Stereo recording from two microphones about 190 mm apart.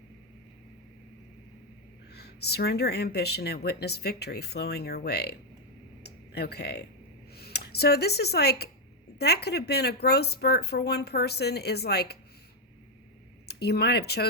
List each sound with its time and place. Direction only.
2.1 s speech: 60° left (ahead or behind)
6.0 s a sound: 60° left (ahead or behind)
7.3 s speech: 55° left (ahead or behind)
13.5 s speech: 60° left (ahead or behind)